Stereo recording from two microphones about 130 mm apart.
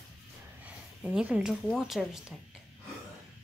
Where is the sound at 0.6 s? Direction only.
10° right (ahead or behind).